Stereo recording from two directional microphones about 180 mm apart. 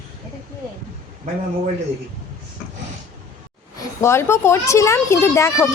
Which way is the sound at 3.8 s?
15° left (ahead or behind).